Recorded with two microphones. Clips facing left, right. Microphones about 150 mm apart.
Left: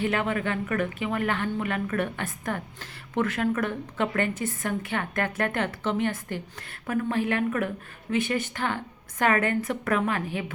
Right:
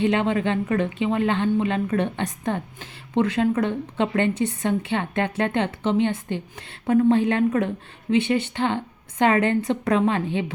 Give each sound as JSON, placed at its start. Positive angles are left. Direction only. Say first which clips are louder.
{"t": 0.0, "sound": "a woman's voice", "louder": "right 5 dB", "side_deg": -25}